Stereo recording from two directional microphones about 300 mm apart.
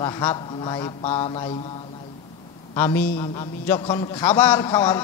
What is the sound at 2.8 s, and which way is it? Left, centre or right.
A man's voice, centre.